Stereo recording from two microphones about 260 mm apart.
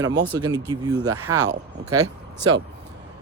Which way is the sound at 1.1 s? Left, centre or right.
Right.